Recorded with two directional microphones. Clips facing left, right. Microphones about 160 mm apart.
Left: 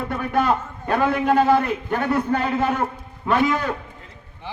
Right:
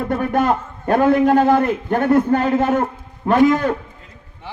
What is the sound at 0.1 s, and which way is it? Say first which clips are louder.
A man's voice: right 3 dB; 50° right (ahead or behind).